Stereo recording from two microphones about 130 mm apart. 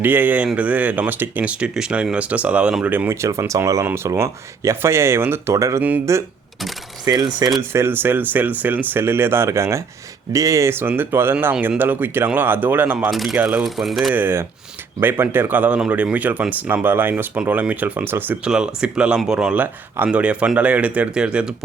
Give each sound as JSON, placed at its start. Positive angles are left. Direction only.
{"t": 0.0, "sound": "speech", "side_deg": -15}
{"t": 7.0, "sound": "speech", "side_deg": -30}
{"t": 7.7, "sound": "speech", "side_deg": -20}
{"t": 13.1, "sound": "a sound", "side_deg": 0}
{"t": 13.3, "sound": "speech", "side_deg": -10}
{"t": 13.7, "sound": "a sound", "side_deg": 0}
{"t": 14.1, "sound": "speech", "side_deg": -15}